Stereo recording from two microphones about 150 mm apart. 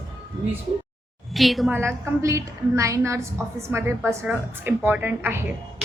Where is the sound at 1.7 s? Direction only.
15° right (ahead or behind).